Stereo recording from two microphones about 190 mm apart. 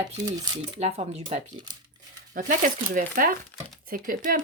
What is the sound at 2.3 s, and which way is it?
Speech, 45° right (ahead or behind).